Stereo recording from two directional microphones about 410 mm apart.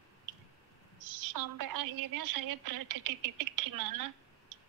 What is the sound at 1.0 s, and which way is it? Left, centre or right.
A woman's voice, right.